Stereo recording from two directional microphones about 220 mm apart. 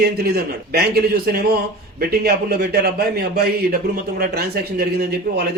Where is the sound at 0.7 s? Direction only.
45° right (ahead or behind).